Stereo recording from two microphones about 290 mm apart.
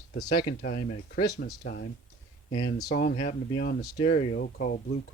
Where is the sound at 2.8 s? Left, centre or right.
Left.